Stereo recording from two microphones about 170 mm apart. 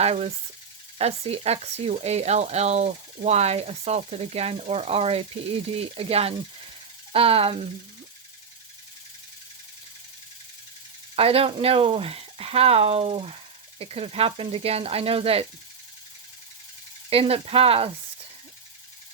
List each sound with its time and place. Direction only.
0.0 s speech: 40° right (ahead or behind)
11.1 s speech: 35° right (ahead or behind)
17.1 s speech: 35° right (ahead or behind)